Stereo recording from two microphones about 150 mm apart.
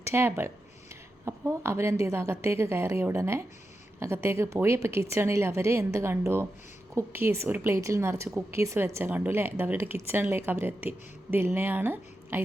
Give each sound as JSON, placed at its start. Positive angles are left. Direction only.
{"t": 0.0, "sound": "a woman's voice", "side_deg": -15}